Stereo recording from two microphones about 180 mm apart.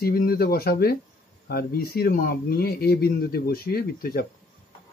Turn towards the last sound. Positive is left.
turn(degrees=60)  # may be behind; listen again after turning